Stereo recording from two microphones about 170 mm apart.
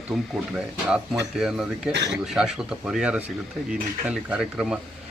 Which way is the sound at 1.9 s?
90° right.